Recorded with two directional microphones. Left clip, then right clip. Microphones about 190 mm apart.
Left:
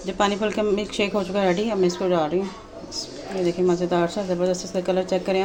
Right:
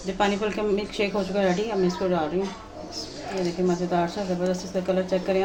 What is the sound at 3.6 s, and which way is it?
Speech, 40° left (ahead or behind).